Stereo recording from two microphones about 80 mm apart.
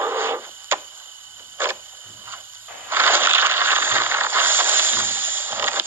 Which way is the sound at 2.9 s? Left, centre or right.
Right.